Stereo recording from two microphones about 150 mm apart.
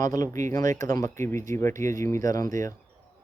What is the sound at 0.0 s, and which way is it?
Speech, 20° left (ahead or behind).